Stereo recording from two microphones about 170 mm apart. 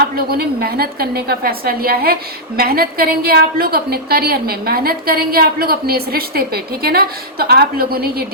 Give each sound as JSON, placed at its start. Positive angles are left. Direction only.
{"t": 0.0, "sound": "a woman's voice", "side_deg": -65}